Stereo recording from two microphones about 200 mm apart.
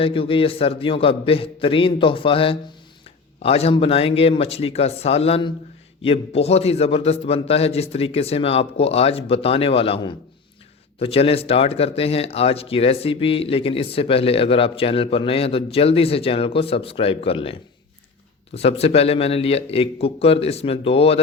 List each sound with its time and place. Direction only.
0.0 s a man's voice: 25° left (ahead or behind)